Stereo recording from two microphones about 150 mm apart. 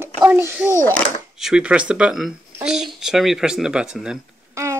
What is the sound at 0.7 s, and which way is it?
Speech, 15° left (ahead or behind).